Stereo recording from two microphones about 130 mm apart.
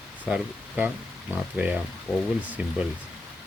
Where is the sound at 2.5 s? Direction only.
10° right (ahead or behind).